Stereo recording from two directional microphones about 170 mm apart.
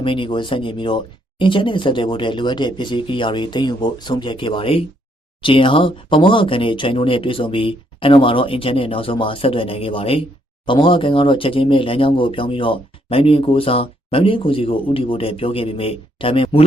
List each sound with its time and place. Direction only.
0.0 s speech: 30° left (ahead or behind)